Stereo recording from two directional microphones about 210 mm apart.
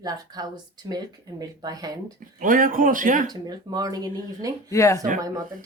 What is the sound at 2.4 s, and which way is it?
Speech, 40° right (ahead or behind).